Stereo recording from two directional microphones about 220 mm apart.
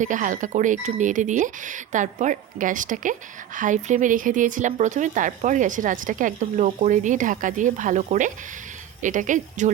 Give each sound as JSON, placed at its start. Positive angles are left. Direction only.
{"t": 0.0, "sound": "speech", "side_deg": -35}